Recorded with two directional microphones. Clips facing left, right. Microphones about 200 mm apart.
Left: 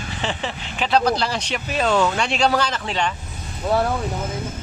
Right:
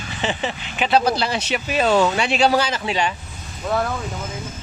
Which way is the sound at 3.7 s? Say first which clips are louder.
Left 2 dB; 35° left (ahead or behind).